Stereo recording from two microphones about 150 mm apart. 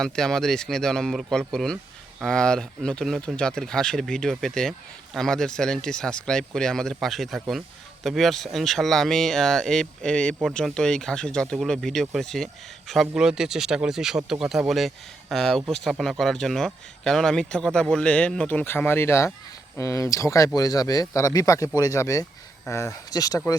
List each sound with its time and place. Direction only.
0.0 s speech: 5° left (ahead or behind); by 23.4 s 25° left (ahead or behind)